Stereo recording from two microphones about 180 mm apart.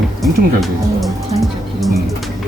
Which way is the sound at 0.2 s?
Centre (ahead or behind).